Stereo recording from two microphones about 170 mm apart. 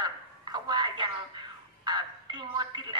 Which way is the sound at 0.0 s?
25° right (ahead or behind).